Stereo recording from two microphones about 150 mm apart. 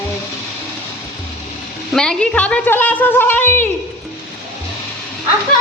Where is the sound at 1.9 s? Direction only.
5° left (ahead or behind).